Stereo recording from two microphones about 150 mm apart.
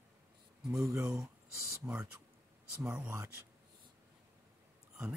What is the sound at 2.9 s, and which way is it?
Speech, 15° right (ahead or behind).